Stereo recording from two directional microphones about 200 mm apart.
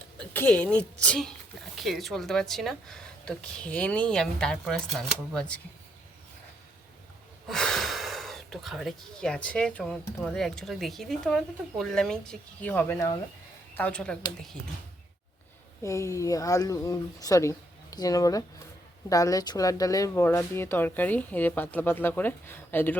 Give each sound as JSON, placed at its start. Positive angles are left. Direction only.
{"t": 0.2, "sound": "speech", "side_deg": 5}
{"t": 7.4, "sound": "speech", "side_deg": 0}
{"t": 15.8, "sound": "speech", "side_deg": 15}